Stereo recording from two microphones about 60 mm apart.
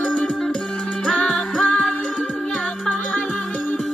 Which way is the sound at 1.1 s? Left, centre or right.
Centre.